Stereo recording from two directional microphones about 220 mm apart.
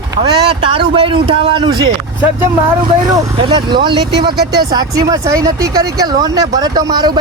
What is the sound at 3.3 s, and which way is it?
A man's voice, 20° right (ahead or behind).